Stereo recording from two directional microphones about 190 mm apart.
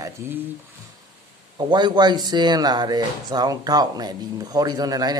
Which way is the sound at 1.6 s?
25° right (ahead or behind).